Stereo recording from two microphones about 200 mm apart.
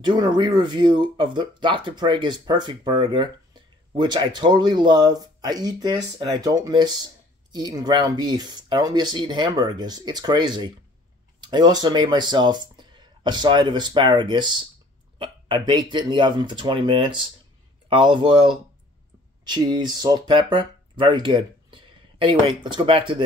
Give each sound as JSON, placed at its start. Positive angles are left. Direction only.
{"t": 0.0, "sound": "speech", "side_deg": -20}